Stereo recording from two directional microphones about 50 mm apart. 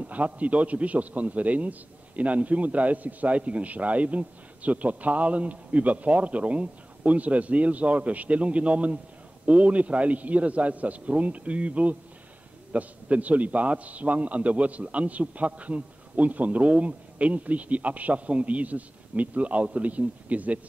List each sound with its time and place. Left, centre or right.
0.0 s a man's voice: right